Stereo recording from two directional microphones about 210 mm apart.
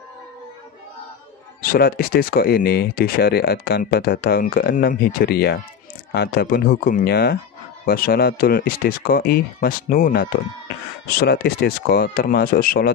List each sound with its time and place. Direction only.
1.6 s speech: 45° left (ahead or behind)